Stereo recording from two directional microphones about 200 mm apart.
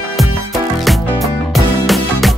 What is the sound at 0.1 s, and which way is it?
Music, centre (ahead or behind).